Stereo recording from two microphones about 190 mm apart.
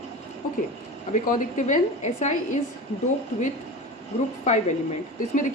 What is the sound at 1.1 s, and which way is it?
A woman's voice, 45° left (ahead or behind).